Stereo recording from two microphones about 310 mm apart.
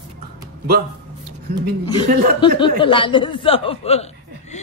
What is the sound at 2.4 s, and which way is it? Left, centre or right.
A woman's voice, centre.